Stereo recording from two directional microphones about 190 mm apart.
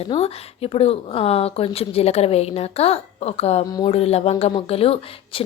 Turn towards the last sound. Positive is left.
turn(degrees=30)  # may be behind; listen again after turning